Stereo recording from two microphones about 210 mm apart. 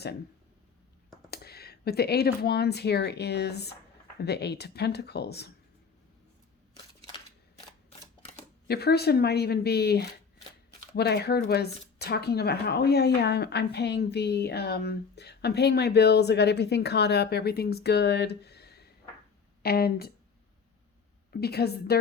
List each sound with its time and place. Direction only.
1.3 s speech: 50° left (ahead or behind)
8.6 s speech: 50° left (ahead or behind)
21.4 s speech: 50° left (ahead or behind)